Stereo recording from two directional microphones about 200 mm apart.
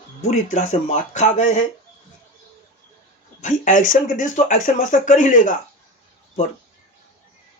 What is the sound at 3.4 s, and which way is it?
Speech, 40° left (ahead or behind).